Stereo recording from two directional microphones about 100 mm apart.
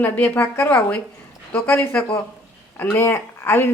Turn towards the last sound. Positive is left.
turn(degrees=25)  # may be behind; listen again after turning